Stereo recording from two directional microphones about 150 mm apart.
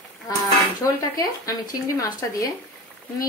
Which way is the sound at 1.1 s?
25° left (ahead or behind).